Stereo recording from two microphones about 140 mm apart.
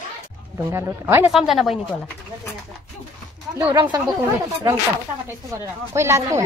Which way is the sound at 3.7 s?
30° right (ahead or behind).